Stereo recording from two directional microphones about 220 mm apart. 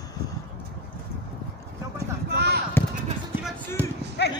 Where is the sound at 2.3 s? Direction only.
45° right (ahead or behind).